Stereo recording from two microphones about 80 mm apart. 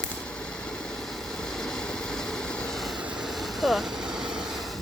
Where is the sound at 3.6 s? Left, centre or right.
Centre.